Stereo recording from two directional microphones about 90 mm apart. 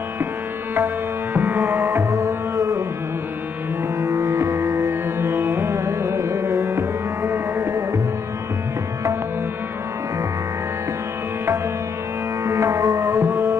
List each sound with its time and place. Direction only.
1.3 s music: 25° right (ahead or behind)
2.0 s tabla: 35° right (ahead or behind)
4.0 s music: 35° right (ahead or behind)
12.4 s music: 30° right (ahead or behind)